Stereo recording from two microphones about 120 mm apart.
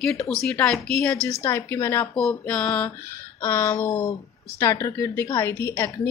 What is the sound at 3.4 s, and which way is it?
A woman's voice, 20° left (ahead or behind).